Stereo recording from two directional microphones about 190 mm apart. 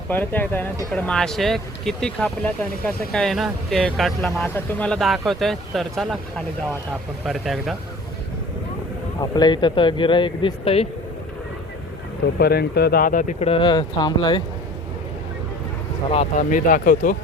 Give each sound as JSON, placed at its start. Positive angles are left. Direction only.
{"t": 0.1, "sound": "speech", "side_deg": 10}
{"t": 9.2, "sound": "speech", "side_deg": 20}
{"t": 12.4, "sound": "speech", "side_deg": 55}
{"t": 13.5, "sound": "speech", "side_deg": 25}
{"t": 16.0, "sound": "speech", "side_deg": 35}